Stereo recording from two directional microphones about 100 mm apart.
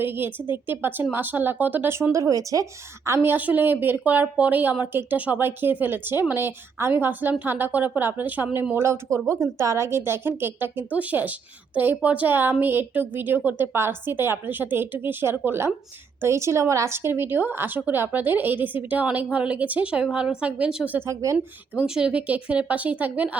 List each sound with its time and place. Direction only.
0.0 s a woman's voice: 20° right (ahead or behind)
3.1 s a woman's voice: 20° right (ahead or behind)
21.1 s speech: 30° right (ahead or behind)
21.3 s speech: 10° right (ahead or behind)